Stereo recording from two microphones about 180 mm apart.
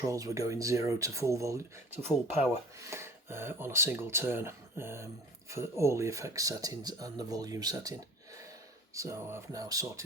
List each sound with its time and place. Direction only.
0.0 s speech: 20° right (ahead or behind)
9.0 s speech: 15° right (ahead or behind)